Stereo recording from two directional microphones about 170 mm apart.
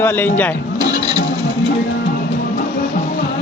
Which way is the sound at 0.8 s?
25° right (ahead or behind).